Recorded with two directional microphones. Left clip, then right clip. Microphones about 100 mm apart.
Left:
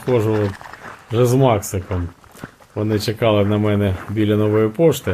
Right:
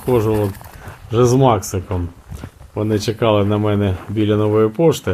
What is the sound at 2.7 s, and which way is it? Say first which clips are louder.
Speech: right 2 dB; 10° right (ahead or behind).